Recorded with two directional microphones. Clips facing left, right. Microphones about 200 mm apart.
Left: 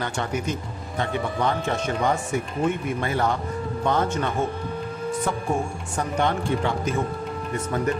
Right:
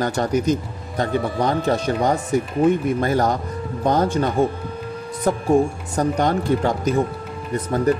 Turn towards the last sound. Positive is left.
turn(degrees=-35)  # may be behind; listen again after turning